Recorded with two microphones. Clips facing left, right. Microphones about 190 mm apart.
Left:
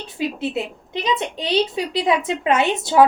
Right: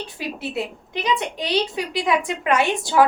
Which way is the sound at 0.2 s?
20° left (ahead or behind).